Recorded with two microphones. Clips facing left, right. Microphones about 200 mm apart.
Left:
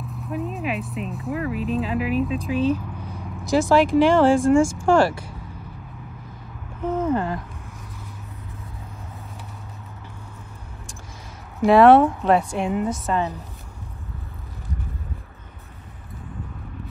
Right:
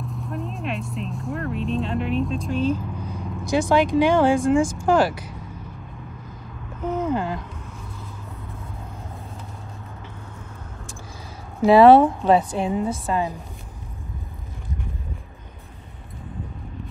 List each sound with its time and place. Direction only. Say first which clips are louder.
0.0 s speech: left 2 dB; centre (ahead or behind)
7.1 s speech: left 2 dB; 5° right (ahead or behind)
11.6 s speech: right 1 dB; centre (ahead or behind)
12.5 s a woman's voice: even; 30° right (ahead or behind)
13.0 s a woman's voice: even; 10° right (ahead or behind)